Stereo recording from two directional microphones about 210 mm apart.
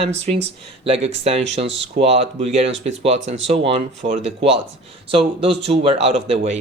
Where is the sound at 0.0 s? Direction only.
30° right (ahead or behind).